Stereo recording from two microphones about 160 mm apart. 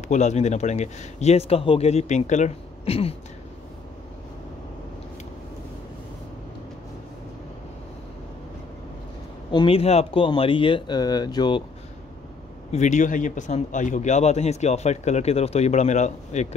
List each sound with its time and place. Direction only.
0.1 s speech: 45° left (ahead or behind)
9.5 s speech: 30° left (ahead or behind)
12.7 s speech: 50° left (ahead or behind)